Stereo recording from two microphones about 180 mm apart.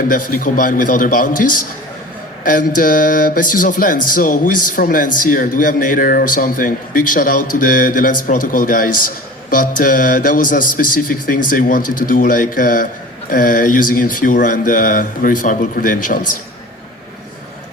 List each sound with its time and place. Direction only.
0.1 s speech: 50° left (ahead or behind)